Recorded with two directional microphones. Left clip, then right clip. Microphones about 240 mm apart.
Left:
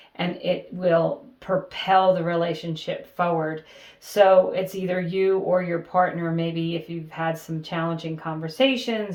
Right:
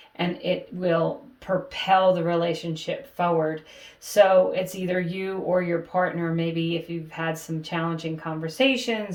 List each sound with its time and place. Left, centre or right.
0.2 s speech: left